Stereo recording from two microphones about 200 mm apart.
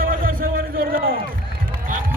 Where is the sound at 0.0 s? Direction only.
45° right (ahead or behind).